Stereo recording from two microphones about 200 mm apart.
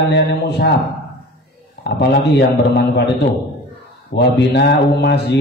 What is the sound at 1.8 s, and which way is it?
Mantra, 55° left (ahead or behind).